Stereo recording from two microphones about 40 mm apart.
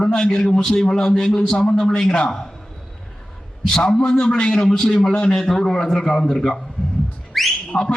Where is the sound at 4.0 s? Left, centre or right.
Left.